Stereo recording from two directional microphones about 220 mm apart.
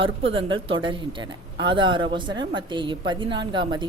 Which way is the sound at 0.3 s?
25° right (ahead or behind).